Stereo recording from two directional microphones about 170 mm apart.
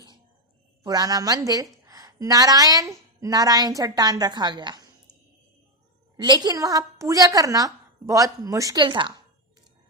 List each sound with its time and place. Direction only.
0.9 s a woman's voice: 20° right (ahead or behind)
6.1 s a woman's voice: 25° right (ahead or behind)